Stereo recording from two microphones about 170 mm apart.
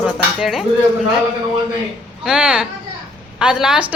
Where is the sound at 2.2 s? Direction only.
5° right (ahead or behind).